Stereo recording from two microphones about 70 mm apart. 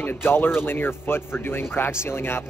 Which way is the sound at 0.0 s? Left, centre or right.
Left.